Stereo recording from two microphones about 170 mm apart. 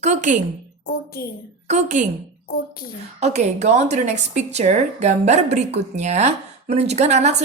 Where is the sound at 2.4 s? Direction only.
60° left (ahead or behind).